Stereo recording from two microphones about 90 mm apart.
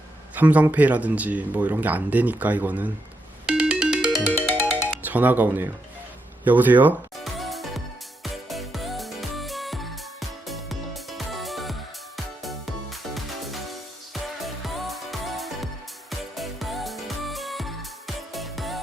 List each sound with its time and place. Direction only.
0.3 s speech: 20° right (ahead or behind)
3.4 s music: 10° right (ahead or behind)
4.3 s ringtone: 20° left (ahead or behind)
4.9 s speech: 20° right (ahead or behind)
7.3 s music: centre (ahead or behind)